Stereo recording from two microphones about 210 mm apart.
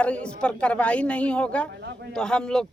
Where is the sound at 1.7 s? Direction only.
55° right (ahead or behind).